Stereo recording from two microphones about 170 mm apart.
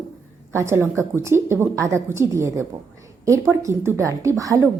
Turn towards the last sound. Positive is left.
turn(degrees=-20)  # may be behind; listen again after turning